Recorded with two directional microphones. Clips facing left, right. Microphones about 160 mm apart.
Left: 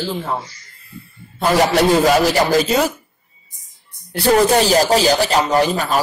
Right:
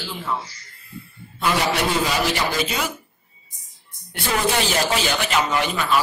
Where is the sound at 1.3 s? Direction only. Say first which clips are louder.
Left 7 dB; 40° left (ahead or behind).